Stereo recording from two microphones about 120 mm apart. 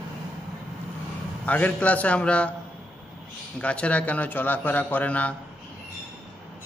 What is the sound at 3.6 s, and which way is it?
A man's voice, 10° left (ahead or behind).